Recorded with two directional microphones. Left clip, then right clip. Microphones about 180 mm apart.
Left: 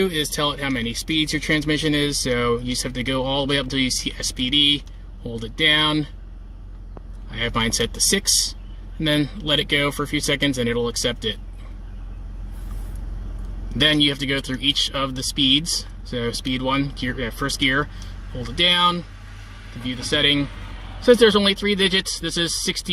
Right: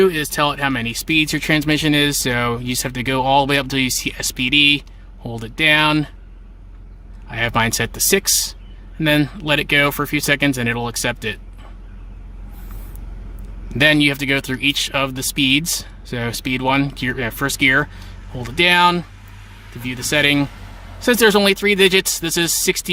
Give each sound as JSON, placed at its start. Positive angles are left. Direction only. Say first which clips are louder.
{"t": 0.0, "sound": "speech", "louder": "right 6 dB", "side_deg": -55}
{"t": 7.3, "sound": "speech", "louder": "right 5 dB", "side_deg": -60}
{"t": 13.7, "sound": "speech", "louder": "right 4 dB", "side_deg": -60}